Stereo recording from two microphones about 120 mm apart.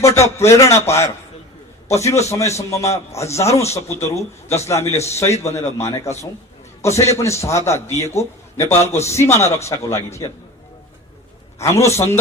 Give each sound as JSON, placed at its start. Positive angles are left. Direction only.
{"t": 0.0, "sound": "a man's voice", "side_deg": 25}
{"t": 3.5, "sound": "speech", "side_deg": 60}
{"t": 3.8, "sound": "a man's voice", "side_deg": 25}
{"t": 11.8, "sound": "a man's voice", "side_deg": 25}